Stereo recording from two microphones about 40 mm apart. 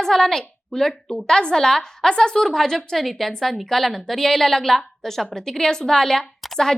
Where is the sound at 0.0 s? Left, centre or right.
Centre.